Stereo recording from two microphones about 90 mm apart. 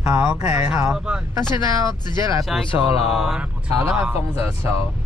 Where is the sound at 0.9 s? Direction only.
10° right (ahead or behind).